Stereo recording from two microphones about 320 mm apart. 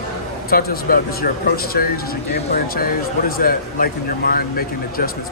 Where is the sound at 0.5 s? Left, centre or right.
Left.